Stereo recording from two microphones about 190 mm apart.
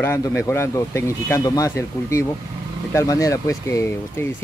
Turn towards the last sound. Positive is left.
turn(degrees=15)  # may be behind; listen again after turning